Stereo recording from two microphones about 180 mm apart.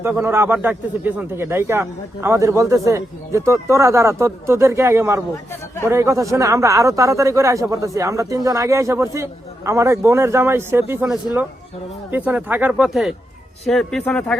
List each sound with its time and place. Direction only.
0.0 s a man's voice: 10° right (ahead or behind)
12.1 s a man's voice: 10° right (ahead or behind)